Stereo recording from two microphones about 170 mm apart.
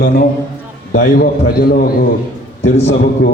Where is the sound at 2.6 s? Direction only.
90° left.